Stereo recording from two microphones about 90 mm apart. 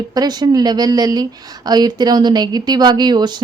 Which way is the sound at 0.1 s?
50° right (ahead or behind).